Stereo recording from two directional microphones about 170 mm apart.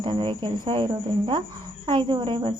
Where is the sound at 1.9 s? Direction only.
25° right (ahead or behind).